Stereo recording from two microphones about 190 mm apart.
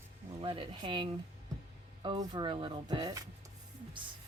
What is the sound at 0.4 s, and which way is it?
Speech, 25° right (ahead or behind).